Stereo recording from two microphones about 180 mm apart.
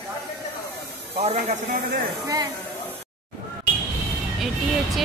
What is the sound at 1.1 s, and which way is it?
Speech, 35° right (ahead or behind).